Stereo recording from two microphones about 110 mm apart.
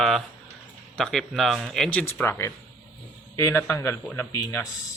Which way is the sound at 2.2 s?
20° left (ahead or behind).